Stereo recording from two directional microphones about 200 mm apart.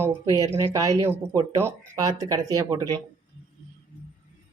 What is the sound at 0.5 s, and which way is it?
Speech, 15° right (ahead or behind).